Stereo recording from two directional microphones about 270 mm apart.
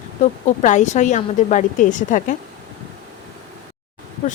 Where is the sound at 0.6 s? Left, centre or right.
Left.